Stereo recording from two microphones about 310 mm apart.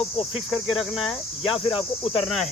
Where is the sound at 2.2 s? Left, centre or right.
Centre.